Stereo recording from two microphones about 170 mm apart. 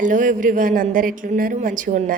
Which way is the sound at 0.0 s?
50° right (ahead or behind).